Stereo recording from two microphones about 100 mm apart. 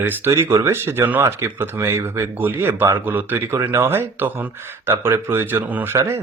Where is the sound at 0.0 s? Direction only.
25° right (ahead or behind).